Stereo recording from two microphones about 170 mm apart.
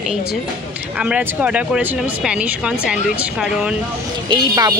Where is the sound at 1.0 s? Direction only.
5° right (ahead or behind).